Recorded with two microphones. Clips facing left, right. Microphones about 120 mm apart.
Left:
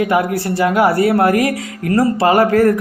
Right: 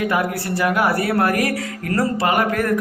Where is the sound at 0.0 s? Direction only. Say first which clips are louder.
Left 5 dB; 25° left (ahead or behind).